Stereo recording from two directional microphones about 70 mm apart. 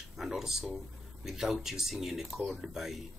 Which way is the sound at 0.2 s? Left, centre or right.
Centre.